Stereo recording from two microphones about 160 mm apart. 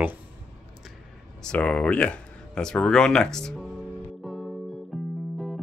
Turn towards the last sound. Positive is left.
turn(degrees=0)  # may be behind; listen again after turning